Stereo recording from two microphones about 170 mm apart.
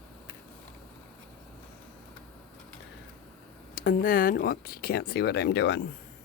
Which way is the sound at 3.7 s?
55° left (ahead or behind).